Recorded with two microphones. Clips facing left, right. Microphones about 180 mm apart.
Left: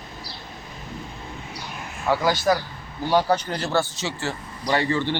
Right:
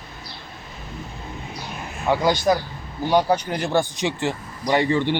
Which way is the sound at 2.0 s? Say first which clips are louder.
Right 2 dB; 20° right (ahead or behind).